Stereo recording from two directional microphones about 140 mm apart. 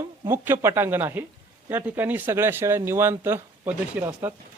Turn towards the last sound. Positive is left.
turn(degrees=-15)  # may be behind; listen again after turning